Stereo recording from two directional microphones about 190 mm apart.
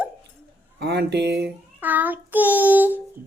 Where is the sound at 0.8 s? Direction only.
60° right (ahead or behind).